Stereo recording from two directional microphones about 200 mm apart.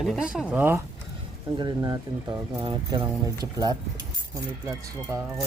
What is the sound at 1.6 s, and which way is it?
Speech, 20° right (ahead or behind).